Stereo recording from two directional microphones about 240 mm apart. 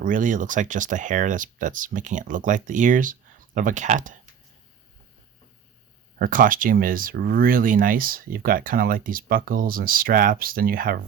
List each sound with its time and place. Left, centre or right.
0.0 s speech: right
6.1 s speech: right